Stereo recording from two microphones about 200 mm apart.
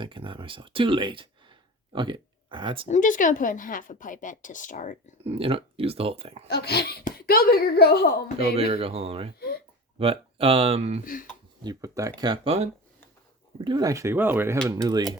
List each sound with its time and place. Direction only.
0.0 s speech: 25° right (ahead or behind)
2.8 s a woman's voice: 40° left (ahead or behind)
5.2 s speech: 30° right (ahead or behind)
6.5 s a child's voice: 55° left (ahead or behind)
8.5 s speech: 30° right (ahead or behind)
11.0 s a child's voice: 45° left (ahead or behind)
11.6 s speech: 20° right (ahead or behind)
13.7 s speech: 20° right (ahead or behind)